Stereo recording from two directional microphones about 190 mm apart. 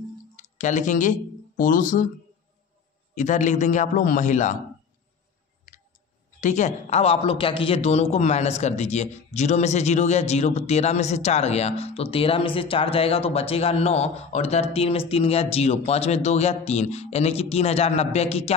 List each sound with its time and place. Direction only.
0.4 s speech: 40° left (ahead or behind)
3.2 s speech: 40° left (ahead or behind)
6.4 s speech: 40° left (ahead or behind)